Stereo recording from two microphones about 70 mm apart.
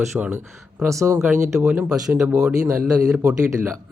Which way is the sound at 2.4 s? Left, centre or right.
Centre.